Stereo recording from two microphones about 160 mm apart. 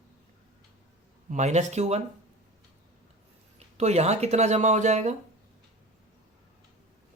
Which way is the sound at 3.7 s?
45° right (ahead or behind).